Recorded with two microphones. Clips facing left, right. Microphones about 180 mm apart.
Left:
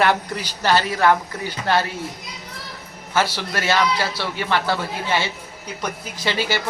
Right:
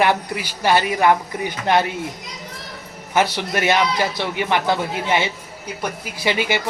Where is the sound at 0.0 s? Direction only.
10° right (ahead or behind).